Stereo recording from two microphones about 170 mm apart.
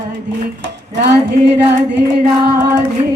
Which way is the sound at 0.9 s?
80° right.